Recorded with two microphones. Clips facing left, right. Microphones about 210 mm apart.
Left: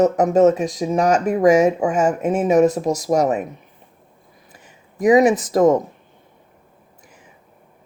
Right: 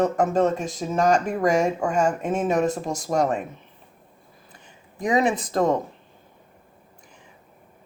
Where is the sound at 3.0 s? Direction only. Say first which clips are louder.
Left 4 dB; 15° left (ahead or behind).